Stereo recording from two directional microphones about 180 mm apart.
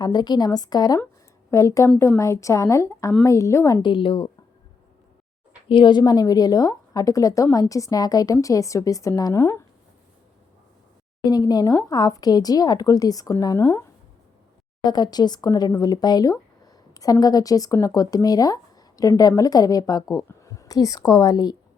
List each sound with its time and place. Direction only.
0.0 s a woman's voice: 25° left (ahead or behind)
3.8 s speech: 30° left (ahead or behind)
5.6 s speech: 25° left (ahead or behind)
11.2 s speech: 20° left (ahead or behind)
14.8 s speech: 25° left (ahead or behind)